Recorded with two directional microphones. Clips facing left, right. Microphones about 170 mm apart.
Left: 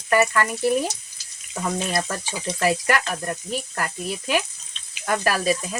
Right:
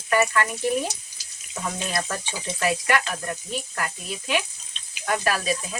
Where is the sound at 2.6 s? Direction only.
45° left (ahead or behind).